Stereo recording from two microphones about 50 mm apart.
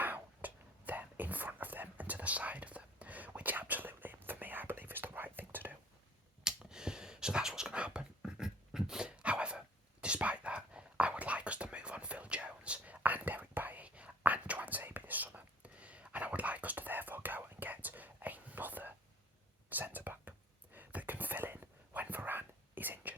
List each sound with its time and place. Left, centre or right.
0.0 s whispering: right
6.4 s a sound: centre; by 18.9 s right
19.7 s whispering: right